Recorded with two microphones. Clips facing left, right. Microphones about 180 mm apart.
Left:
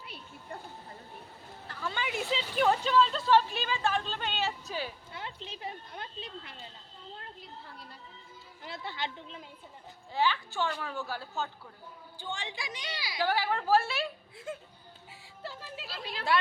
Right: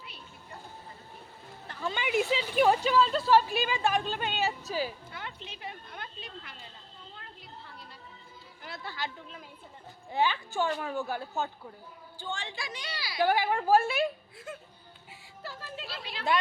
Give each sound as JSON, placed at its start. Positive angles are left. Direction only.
{"t": 1.6, "sound": "a woman's voice", "side_deg": -20}
{"t": 5.1, "sound": "speech", "side_deg": 30}
{"t": 8.6, "sound": "speech", "side_deg": 25}
{"t": 10.1, "sound": "speech", "side_deg": -20}
{"t": 10.5, "sound": "a woman's voice", "side_deg": -45}
{"t": 10.8, "sound": "speech", "side_deg": -20}
{"t": 12.2, "sound": "a woman's voice", "side_deg": 15}
{"t": 13.2, "sound": "a woman's voice", "side_deg": -15}
{"t": 15.6, "sound": "speech", "side_deg": 5}
{"t": 16.3, "sound": "a woman's voice", "side_deg": -20}